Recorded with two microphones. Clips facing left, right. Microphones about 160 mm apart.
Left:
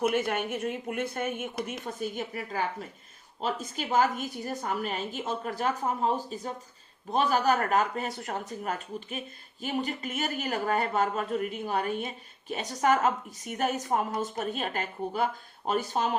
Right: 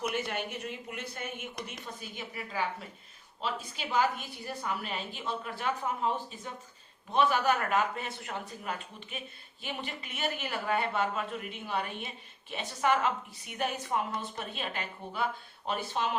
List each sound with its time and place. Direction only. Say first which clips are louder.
0.0 s speech: left 6 dB; 50° left (ahead or behind)